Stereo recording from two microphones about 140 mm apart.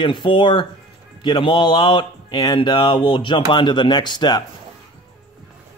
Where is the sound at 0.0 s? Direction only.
35° left (ahead or behind).